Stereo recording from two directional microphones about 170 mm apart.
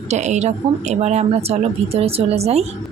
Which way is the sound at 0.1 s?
45° right (ahead or behind).